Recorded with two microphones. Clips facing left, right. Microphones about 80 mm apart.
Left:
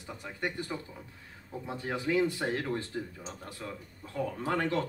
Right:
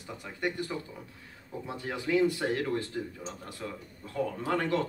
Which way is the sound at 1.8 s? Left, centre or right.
Left.